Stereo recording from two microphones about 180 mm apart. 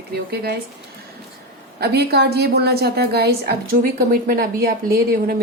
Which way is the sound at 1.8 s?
65° right (ahead or behind).